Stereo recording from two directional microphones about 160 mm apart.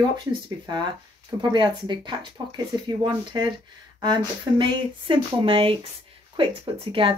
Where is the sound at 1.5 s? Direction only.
30° right (ahead or behind).